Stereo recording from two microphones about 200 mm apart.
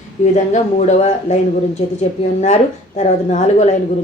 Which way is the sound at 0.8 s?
35° left (ahead or behind).